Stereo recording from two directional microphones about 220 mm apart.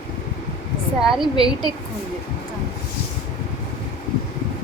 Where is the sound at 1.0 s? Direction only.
Centre (ahead or behind).